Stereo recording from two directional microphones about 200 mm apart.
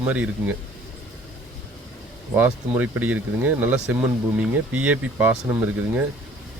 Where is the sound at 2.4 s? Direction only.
10° right (ahead or behind).